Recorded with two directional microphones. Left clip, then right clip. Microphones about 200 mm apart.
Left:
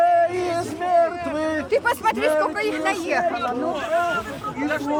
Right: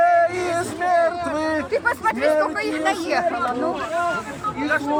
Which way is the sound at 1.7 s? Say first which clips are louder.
Left 2 dB; 50° left (ahead or behind).